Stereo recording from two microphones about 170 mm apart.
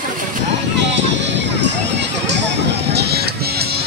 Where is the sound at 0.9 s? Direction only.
90° right; by 3.8 s 70° right (ahead or behind).